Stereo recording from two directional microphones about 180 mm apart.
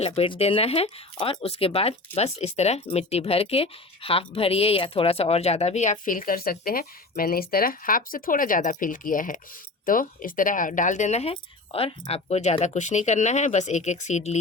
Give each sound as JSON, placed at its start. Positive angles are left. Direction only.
{"t": 0.0, "sound": "speech", "side_deg": 35}